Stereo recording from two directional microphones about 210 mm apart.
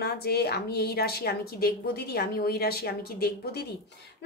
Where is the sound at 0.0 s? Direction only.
50° left (ahead or behind).